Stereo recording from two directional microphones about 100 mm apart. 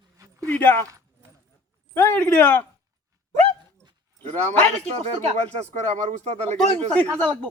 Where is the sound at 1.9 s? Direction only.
15° left (ahead or behind).